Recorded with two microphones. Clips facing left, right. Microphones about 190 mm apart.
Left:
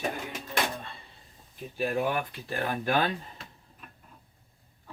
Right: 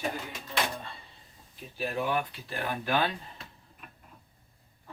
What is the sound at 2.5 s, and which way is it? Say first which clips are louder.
Speech: left 2 dB; 45° left (ahead or behind).